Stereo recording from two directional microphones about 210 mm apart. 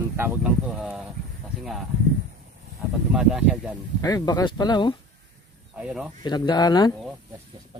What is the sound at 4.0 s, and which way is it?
Speech, 15° left (ahead or behind).